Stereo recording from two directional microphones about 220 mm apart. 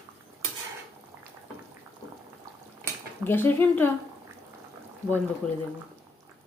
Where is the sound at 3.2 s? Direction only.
10° left (ahead or behind).